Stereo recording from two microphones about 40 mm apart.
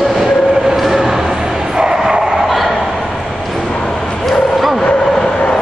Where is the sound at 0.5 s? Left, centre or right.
Centre.